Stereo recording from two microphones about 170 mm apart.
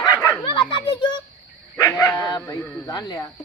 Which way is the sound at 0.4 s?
30° left (ahead or behind).